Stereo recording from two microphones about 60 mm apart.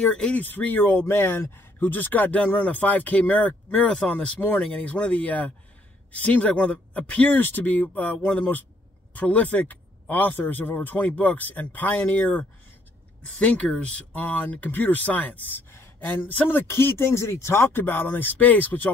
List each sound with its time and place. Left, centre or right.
0.1 s speech: left